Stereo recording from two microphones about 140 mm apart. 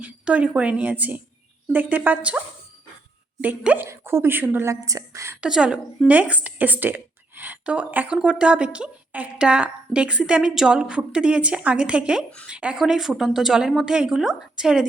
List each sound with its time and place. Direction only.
0.0 s a woman's voice: 10° right (ahead or behind)
3.4 s a woman's voice: 10° right (ahead or behind)
5.4 s a woman's voice: 5° right (ahead or behind)